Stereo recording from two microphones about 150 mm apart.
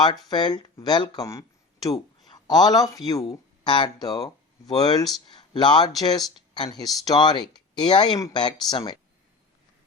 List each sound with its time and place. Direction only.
0.3 s speech: 30° left (ahead or behind)